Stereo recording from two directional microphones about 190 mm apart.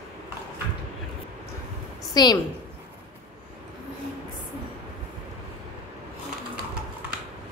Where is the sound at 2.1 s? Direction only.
20° left (ahead or behind).